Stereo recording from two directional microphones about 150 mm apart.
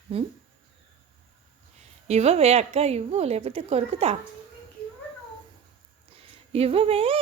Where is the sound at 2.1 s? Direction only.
45° right (ahead or behind).